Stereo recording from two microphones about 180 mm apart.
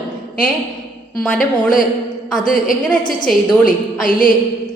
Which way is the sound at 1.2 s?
Centre (ahead or behind).